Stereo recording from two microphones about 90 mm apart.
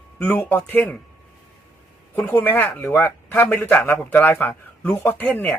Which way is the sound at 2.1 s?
20° left (ahead or behind).